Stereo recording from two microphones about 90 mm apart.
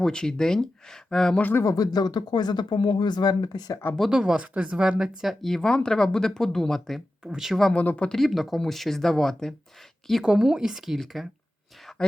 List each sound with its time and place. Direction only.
0.0 s speech: 10° left (ahead or behind)
1.4 s speech: 20° left (ahead or behind)
1.6 s speech: 45° left (ahead or behind)
4.1 s speech: 10° right (ahead or behind)
7.7 s speech: 15° left (ahead or behind)
8.2 s speech: centre (ahead or behind)
12.0 s speech: 10° left (ahead or behind)